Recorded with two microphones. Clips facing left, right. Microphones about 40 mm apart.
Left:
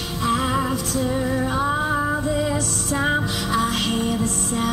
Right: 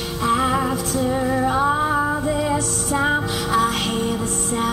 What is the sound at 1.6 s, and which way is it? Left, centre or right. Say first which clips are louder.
Music: right 2 dB; centre.